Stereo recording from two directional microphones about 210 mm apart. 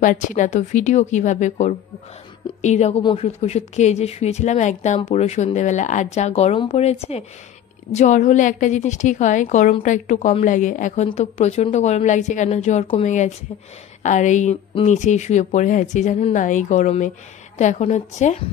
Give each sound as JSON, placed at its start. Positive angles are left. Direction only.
{"t": 0.0, "sound": "speech", "side_deg": 35}